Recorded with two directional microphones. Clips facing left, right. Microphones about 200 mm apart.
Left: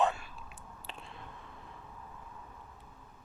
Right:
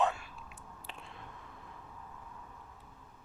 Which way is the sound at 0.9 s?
30° left (ahead or behind).